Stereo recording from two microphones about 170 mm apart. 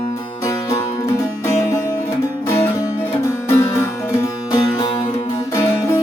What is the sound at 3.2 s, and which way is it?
Music, 15° left (ahead or behind).